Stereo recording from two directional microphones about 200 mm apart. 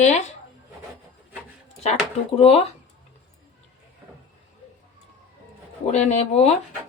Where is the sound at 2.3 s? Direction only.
30° left (ahead or behind).